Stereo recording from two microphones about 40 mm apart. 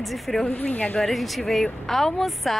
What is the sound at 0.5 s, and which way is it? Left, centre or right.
Speech, left.